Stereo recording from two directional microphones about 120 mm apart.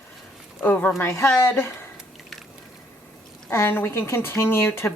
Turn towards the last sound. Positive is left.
turn(degrees=20)  # may be behind; listen again after turning